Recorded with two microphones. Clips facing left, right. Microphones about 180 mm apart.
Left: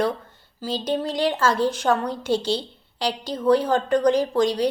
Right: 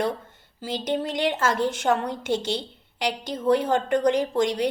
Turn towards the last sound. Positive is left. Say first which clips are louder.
# left 2 dB
turn(degrees=-20)  # may be behind; listen again after turning